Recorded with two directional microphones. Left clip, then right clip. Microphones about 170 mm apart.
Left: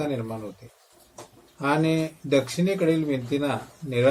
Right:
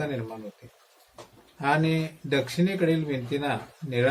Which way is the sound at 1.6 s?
5° right (ahead or behind).